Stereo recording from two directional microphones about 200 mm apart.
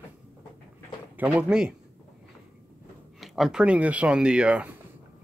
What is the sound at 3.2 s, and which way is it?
Speech, centre (ahead or behind).